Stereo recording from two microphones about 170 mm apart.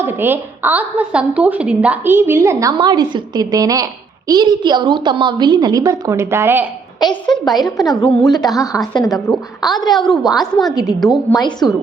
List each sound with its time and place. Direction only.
0.0 s a woman's voice: 15° right (ahead or behind)
7.3 s a woman's voice: centre (ahead or behind)
8.3 s a woman's voice: 20° left (ahead or behind)
8.6 s a woman's voice: 5° right (ahead or behind)